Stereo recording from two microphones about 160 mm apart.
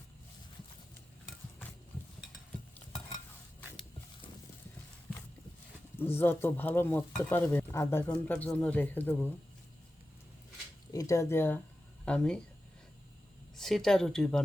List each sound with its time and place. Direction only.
6.0 s speech: 15° left (ahead or behind)
10.9 s speech: 20° left (ahead or behind)
13.6 s speech: centre (ahead or behind)